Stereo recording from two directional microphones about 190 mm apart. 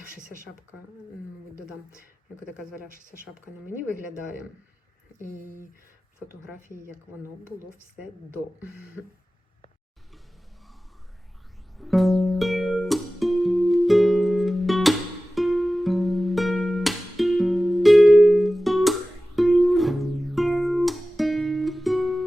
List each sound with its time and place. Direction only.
0.1 s speech: 45° right (ahead or behind)
11.8 s music: centre (ahead or behind)